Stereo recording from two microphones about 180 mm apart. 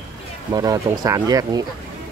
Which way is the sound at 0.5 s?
20° right (ahead or behind).